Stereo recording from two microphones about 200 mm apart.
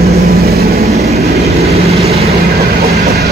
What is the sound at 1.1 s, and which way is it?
Train, 30° right (ahead or behind).